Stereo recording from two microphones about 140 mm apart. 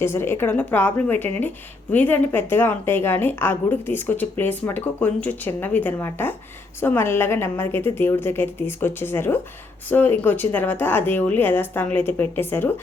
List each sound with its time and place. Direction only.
0.0 s a woman's voice: 15° left (ahead or behind)